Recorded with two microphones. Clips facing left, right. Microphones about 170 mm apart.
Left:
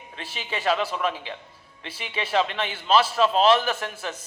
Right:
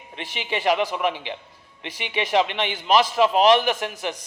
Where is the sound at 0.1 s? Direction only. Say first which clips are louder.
Right 4 dB; 15° right (ahead or behind).